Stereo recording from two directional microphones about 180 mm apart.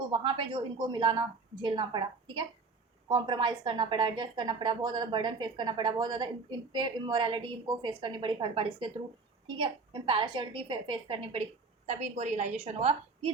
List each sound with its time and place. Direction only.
0.1 s a woman's voice: 30° right (ahead or behind)